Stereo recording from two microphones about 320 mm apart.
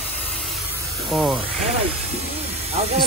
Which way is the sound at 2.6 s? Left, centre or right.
Centre.